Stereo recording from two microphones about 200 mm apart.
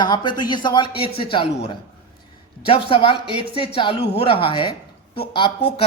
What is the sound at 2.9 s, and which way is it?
Speech, 25° left (ahead or behind).